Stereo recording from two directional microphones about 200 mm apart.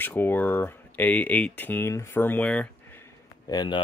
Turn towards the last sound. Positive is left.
turn(degrees=20)  # may be behind; listen again after turning